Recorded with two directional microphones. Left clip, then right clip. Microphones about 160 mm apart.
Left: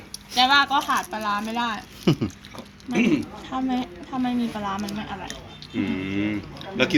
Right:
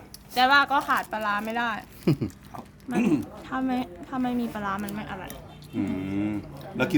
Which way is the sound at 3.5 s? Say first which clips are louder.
Left 1 dB; 5° right (ahead or behind).